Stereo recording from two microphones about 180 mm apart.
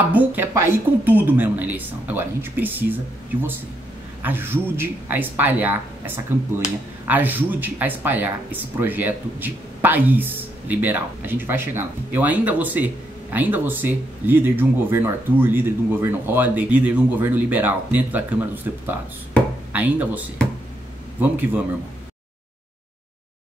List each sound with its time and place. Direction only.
0.1 s speech: 10° right (ahead or behind)
4.2 s speech: 10° right (ahead or behind)